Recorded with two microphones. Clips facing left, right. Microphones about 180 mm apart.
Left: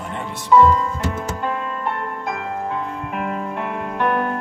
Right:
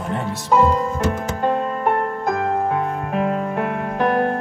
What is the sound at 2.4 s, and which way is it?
Music, 55° right (ahead or behind).